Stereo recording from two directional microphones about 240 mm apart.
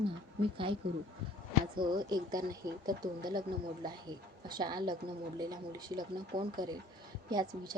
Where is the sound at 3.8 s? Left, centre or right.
Centre.